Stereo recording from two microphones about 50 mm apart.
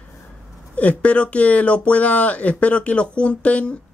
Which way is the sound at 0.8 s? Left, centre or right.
Left.